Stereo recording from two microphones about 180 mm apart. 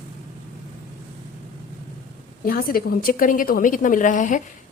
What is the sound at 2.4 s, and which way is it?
Speech, 55° left (ahead or behind).